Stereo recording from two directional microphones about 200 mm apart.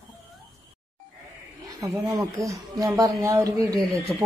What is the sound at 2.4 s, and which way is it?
Speech, 15° right (ahead or behind).